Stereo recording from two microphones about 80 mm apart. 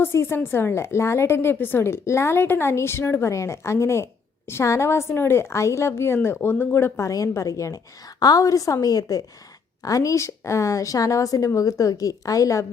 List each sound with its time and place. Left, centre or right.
0.0 s a woman's voice: left
7.1 s a woman's voice: left